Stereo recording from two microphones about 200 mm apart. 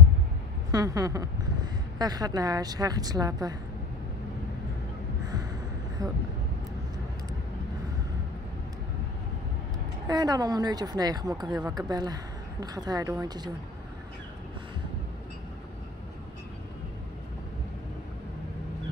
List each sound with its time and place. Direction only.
0.7 s speech: 15° right (ahead or behind)
5.2 s gasp: 20° right (ahead or behind)
10.0 s a woman's voice: 20° right (ahead or behind)